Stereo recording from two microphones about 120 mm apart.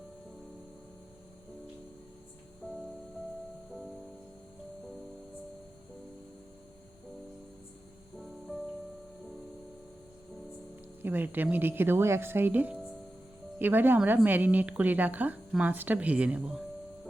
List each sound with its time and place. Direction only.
2.6 s music: 10° left (ahead or behind)
8.2 s music: centre (ahead or behind)
11.0 s a woman's voice: 15° right (ahead or behind)